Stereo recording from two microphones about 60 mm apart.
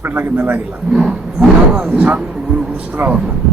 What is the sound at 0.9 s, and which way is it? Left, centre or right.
Speech, centre.